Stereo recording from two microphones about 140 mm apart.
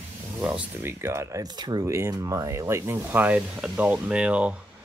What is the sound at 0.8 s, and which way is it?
Speech, 15° right (ahead or behind).